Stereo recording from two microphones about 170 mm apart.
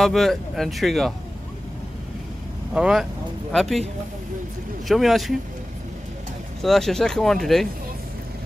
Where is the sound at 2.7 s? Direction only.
5° right (ahead or behind).